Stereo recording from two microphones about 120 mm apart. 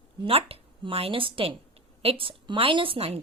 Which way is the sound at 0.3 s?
55° right (ahead or behind).